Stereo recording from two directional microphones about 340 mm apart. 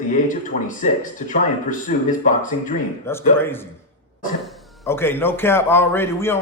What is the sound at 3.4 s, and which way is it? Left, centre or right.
Speech, centre.